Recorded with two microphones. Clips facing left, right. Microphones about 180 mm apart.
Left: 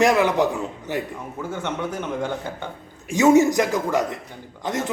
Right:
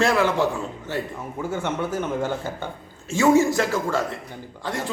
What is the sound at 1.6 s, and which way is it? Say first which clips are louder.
Speech: right 1 dB; 5° right (ahead or behind).